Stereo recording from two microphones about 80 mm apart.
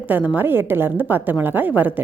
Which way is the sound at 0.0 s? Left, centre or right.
Right.